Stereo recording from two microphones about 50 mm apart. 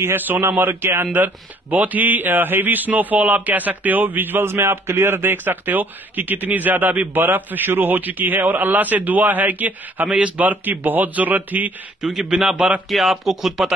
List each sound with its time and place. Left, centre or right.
0.0 s speech: right
1.1 s a man's voice: right
12.0 s a man's voice: centre